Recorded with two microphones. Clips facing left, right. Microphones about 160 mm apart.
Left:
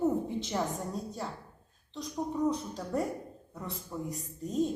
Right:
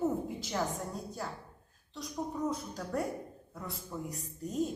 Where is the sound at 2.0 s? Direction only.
Centre (ahead or behind).